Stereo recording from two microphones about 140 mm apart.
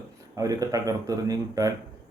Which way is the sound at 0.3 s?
25° right (ahead or behind).